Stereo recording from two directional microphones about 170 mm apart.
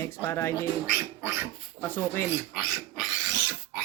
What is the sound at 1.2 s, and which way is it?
Speech, 15° right (ahead or behind).